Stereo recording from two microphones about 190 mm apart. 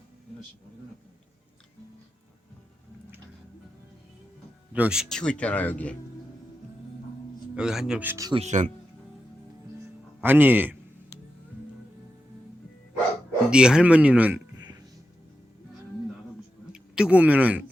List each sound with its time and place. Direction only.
4.7 s speech: 5° right (ahead or behind)
7.5 s speech: 5° right (ahead or behind)
8.4 s speech: 40° right (ahead or behind)
10.2 s speech: 10° right (ahead or behind)
13.5 s speech: 5° right (ahead or behind)
16.7 s speech: 5° right (ahead or behind)